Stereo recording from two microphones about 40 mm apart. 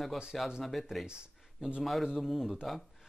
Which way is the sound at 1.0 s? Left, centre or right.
Right.